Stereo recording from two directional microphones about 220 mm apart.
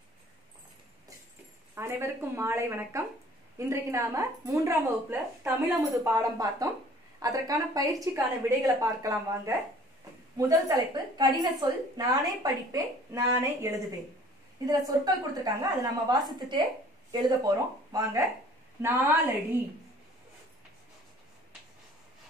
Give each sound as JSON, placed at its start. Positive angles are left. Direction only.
{"t": 1.8, "sound": "a woman's voice", "side_deg": -10}
{"t": 14.9, "sound": "a woman's voice", "side_deg": -15}